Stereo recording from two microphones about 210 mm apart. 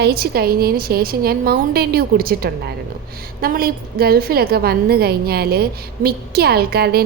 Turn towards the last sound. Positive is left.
turn(degrees=-50)  # may be behind; listen again after turning